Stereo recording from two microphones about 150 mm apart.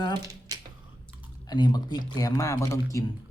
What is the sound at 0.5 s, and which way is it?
Typing, 25° right (ahead or behind).